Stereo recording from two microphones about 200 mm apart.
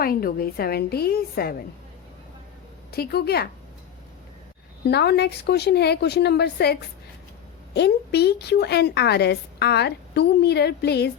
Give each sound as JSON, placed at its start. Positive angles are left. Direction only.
{"t": 0.0, "sound": "a woman's voice", "side_deg": 45}
{"t": 2.9, "sound": "a woman's voice", "side_deg": 50}
{"t": 4.9, "sound": "a woman's voice", "side_deg": 55}